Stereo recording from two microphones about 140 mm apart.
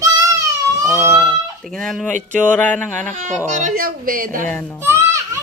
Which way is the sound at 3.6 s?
90° right.